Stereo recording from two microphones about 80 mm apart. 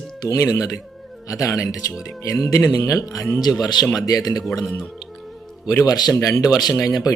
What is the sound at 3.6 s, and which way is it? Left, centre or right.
Speech, left.